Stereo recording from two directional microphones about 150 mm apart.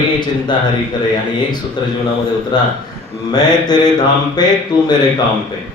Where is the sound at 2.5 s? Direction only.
30° left (ahead or behind).